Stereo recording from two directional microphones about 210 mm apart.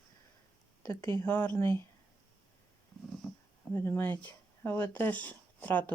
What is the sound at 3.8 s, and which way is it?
Speech, 10° left (ahead or behind).